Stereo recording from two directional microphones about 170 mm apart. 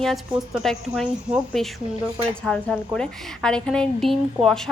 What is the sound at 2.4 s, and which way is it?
A woman's voice, 5° left (ahead or behind).